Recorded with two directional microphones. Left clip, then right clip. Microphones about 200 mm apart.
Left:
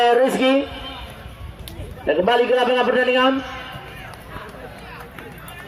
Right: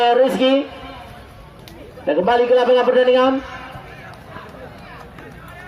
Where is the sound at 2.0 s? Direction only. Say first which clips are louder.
Right 1 dB; 45° right (ahead or behind).